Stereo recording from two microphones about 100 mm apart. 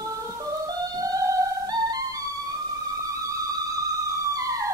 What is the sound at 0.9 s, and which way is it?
Music, 40° right (ahead or behind).